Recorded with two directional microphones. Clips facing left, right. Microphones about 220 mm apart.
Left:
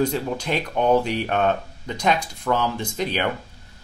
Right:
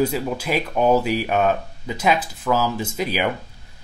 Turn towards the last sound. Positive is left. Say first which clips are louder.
# right 1 dB
turn(degrees=-10)  # may be behind; listen again after turning